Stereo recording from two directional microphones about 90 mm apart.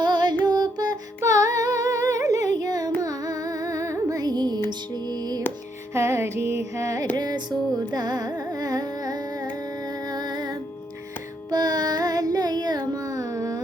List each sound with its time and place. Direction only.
0.0 s music: 55° right (ahead or behind)
5.9 s music: 30° right (ahead or behind)
7.2 s music: 50° right (ahead or behind)
7.9 s carnatic music: 45° right (ahead or behind)
10.1 s music: 50° right (ahead or behind)
11.5 s carnatic music: 45° right (ahead or behind)